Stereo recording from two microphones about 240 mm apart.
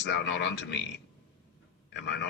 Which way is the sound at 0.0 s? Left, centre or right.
Left.